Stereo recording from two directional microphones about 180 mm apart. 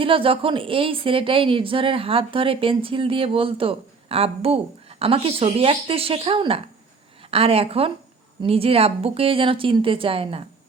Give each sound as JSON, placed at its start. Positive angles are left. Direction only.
{"t": 0.0, "sound": "a woman's voice", "side_deg": -30}